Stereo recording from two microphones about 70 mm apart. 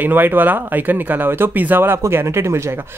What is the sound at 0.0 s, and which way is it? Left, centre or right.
Speech, right.